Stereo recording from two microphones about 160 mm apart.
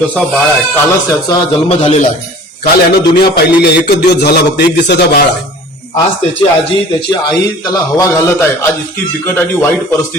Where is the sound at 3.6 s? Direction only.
90° left.